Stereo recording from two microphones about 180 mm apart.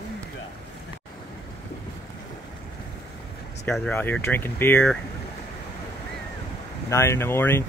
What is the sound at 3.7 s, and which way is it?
Speech, 10° left (ahead or behind).